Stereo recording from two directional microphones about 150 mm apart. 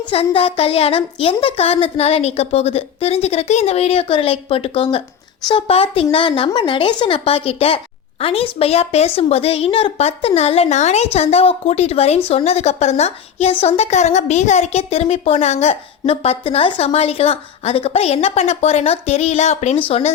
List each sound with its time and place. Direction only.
0.1 s a woman's voice: 40° left (ahead or behind)